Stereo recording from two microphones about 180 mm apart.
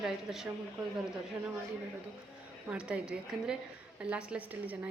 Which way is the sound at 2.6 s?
5° right (ahead or behind).